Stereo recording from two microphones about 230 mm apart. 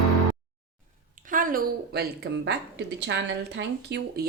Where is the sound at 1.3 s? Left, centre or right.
Right.